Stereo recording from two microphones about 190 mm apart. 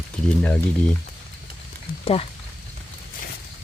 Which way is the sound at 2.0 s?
30° left (ahead or behind).